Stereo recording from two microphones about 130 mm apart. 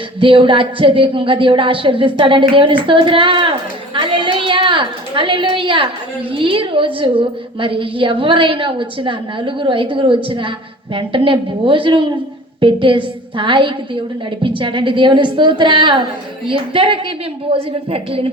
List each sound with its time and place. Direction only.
0.2 s speech: 40° right (ahead or behind)